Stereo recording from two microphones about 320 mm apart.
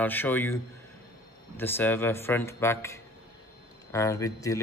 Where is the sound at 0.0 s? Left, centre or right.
Centre.